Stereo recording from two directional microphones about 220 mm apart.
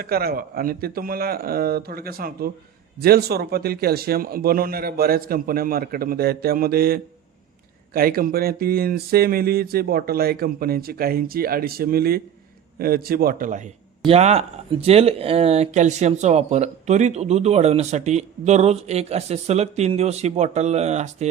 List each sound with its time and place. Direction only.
0.0 s speech: 45° right (ahead or behind)
14.1 s speech: 30° right (ahead or behind)